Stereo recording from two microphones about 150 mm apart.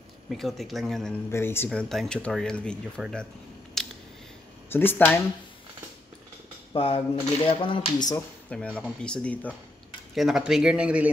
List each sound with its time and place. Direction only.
0.3 s speech: centre (ahead or behind)
1.3 s speech: 15° left (ahead or behind)
3.8 s a sound: centre (ahead or behind)
4.6 s speech: 15° left (ahead or behind)
6.7 s speech: 40° left (ahead or behind)
8.5 s speech: 5° left (ahead or behind)
10.1 s speech: 5° right (ahead or behind)